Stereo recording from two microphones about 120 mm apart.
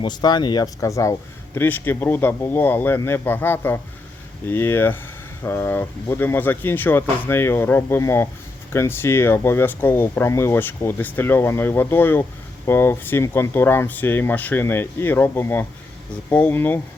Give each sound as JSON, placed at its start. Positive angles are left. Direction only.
{"t": 0.0, "sound": "speech", "side_deg": 35}